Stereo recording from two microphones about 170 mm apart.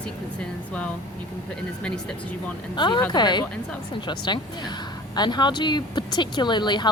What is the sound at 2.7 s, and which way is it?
Speech, 25° left (ahead or behind).